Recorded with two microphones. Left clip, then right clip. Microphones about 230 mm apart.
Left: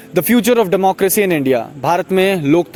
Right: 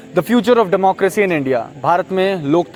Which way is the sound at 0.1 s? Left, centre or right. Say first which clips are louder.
Even; left.